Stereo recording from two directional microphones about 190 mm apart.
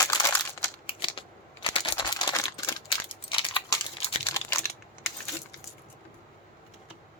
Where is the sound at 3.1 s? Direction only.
25° left (ahead or behind).